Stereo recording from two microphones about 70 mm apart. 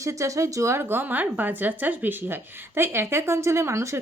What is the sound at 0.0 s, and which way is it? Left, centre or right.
A woman's voice, right.